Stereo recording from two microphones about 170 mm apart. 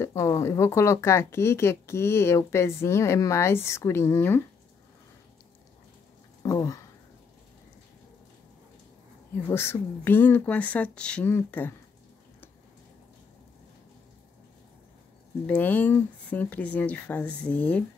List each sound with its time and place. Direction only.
0.0 s speech: 20° left (ahead or behind)
6.4 s speech: 20° left (ahead or behind)
9.5 s speech: 15° left (ahead or behind)
15.4 s speech: 10° left (ahead or behind)